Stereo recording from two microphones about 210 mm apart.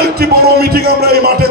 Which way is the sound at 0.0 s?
50° right (ahead or behind).